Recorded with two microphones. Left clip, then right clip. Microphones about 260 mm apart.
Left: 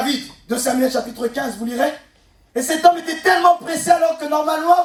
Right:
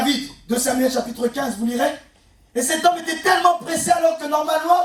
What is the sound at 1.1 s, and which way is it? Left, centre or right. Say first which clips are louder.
Speech: even; left.